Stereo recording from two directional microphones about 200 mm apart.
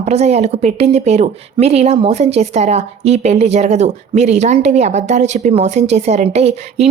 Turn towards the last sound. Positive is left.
turn(degrees=-30)  # may be behind; listen again after turning